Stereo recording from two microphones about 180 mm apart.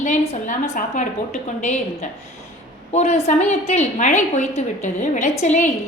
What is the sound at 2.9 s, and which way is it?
A woman's voice, 40° left (ahead or behind).